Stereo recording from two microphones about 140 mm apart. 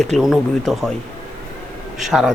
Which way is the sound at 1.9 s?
Centre (ahead or behind).